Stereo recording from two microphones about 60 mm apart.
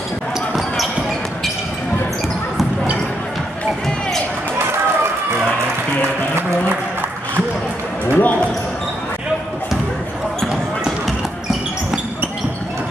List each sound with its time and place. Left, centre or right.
8.1 s basketball bounce: left
10.4 s basketball bounce: centre